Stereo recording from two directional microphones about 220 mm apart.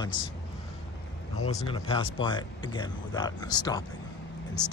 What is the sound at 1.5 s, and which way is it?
Speech, 25° left (ahead or behind).